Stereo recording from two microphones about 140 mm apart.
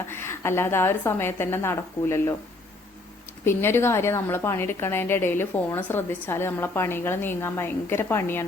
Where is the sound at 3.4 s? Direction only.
15° left (ahead or behind).